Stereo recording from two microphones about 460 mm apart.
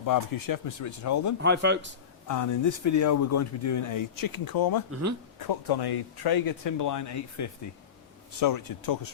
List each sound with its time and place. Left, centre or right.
0.0 s speech: left
1.4 s speech: right
2.2 s speech: left
4.9 s speech: right
5.4 s speech: left